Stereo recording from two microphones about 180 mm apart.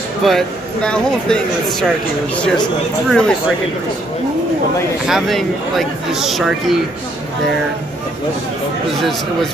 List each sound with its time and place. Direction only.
0.2 s speech: centre (ahead or behind)
5.0 s speech: centre (ahead or behind)